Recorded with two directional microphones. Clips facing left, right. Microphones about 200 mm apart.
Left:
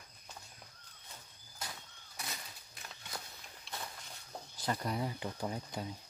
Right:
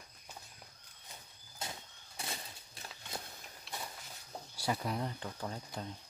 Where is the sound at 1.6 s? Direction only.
25° right (ahead or behind).